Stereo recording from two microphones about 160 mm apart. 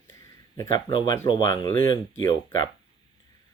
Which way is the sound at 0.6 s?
30° left (ahead or behind).